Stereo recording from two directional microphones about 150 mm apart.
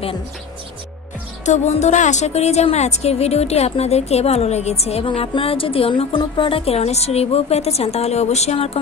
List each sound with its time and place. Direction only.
1.4 s a woman's voice: 50° left (ahead or behind)